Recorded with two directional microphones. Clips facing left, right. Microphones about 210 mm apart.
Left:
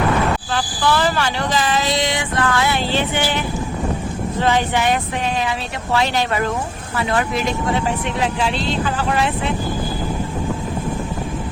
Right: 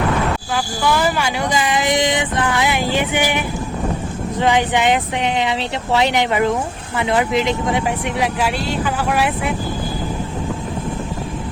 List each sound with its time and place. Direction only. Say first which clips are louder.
0.5 s a woman's voice: right 3 dB; 10° right (ahead or behind)